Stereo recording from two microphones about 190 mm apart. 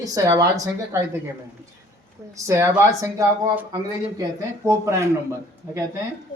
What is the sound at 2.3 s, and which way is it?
Speech, 15° right (ahead or behind).